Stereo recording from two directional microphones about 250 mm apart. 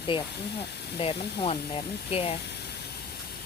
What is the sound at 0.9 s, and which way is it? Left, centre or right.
Speech, left.